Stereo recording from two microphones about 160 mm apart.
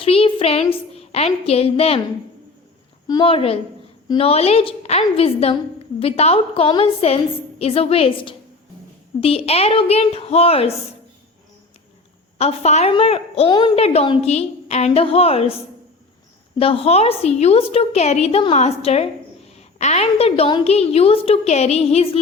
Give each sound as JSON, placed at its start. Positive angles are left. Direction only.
{"t": 0.0, "sound": "a woman's voice", "side_deg": 35}
{"t": 3.1, "sound": "a woman's voice", "side_deg": 30}
{"t": 12.4, "sound": "a woman's voice", "side_deg": 40}
{"t": 16.6, "sound": "a woman's voice", "side_deg": 35}